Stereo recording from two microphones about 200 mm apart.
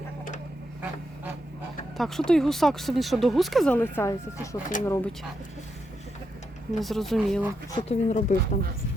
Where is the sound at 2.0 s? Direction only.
Centre (ahead or behind).